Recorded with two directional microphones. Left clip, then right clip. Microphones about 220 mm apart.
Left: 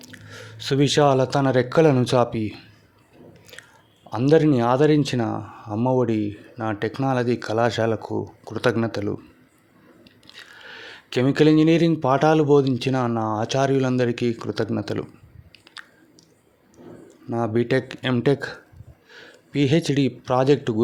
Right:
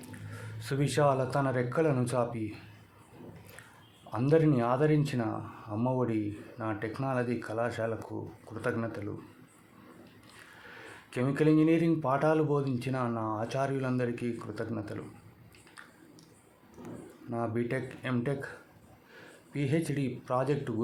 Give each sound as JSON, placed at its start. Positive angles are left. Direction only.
{"t": 0.3, "sound": "speech", "side_deg": 40}
{"t": 4.1, "sound": "speech", "side_deg": 40}
{"t": 10.8, "sound": "speech", "side_deg": 40}
{"t": 17.2, "sound": "speech", "side_deg": 40}
{"t": 19.5, "sound": "speech", "side_deg": 40}